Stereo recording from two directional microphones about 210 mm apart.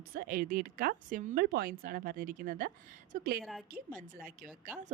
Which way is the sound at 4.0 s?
40° right (ahead or behind).